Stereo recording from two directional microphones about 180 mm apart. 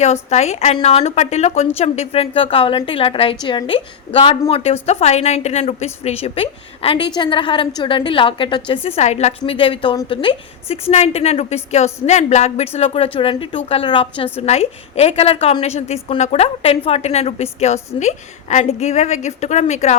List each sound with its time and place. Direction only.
0.0 s a woman's voice: 35° left (ahead or behind)